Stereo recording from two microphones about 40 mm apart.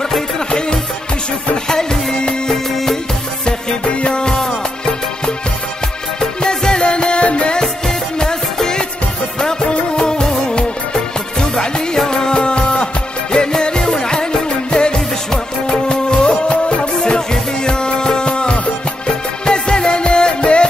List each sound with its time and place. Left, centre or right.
0.5 s music: left
7.6 s music: centre